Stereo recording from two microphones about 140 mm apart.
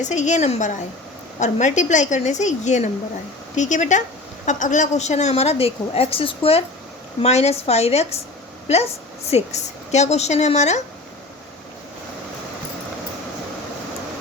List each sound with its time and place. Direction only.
0.0 s a woman's voice: 60° left (ahead or behind)